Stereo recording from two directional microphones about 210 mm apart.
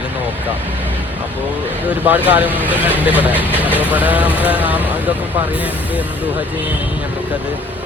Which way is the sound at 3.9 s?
5° right (ahead or behind).